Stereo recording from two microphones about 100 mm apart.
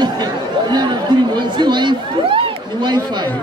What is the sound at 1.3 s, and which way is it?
A man's voice, 50° right (ahead or behind).